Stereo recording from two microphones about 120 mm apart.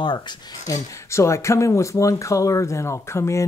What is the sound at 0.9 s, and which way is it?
Speech, 25° left (ahead or behind).